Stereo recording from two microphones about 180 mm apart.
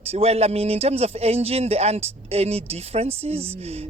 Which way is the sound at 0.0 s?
35° right (ahead or behind).